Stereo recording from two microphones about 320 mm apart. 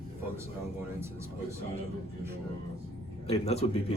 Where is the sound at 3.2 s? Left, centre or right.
Centre.